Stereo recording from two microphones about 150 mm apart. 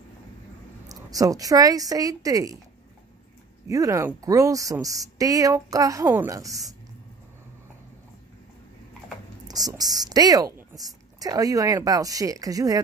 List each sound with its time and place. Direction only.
0.8 s a woman's voice: 25° right (ahead or behind)
3.6 s a woman's voice: 20° right (ahead or behind)
9.5 s a woman's voice: 25° right (ahead or behind)